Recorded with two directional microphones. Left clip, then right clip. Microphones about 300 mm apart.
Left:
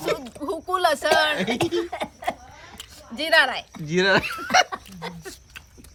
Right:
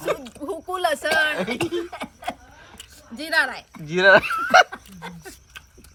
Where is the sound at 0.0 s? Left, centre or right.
Centre.